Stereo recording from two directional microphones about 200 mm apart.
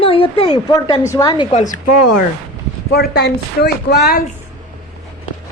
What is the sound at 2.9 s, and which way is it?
Speech, 50° left (ahead or behind).